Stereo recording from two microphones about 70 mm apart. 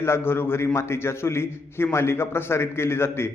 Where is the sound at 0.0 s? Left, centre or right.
Left.